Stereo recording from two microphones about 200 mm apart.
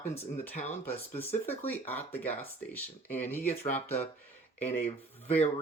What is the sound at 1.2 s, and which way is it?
Speech, 10° left (ahead or behind).